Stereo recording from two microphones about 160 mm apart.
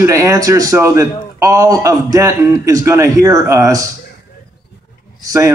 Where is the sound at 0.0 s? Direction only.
20° right (ahead or behind).